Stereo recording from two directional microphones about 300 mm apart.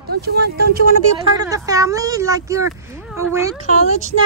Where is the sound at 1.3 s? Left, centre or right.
Centre.